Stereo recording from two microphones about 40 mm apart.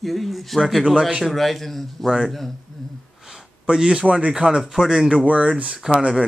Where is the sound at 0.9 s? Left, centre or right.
Centre.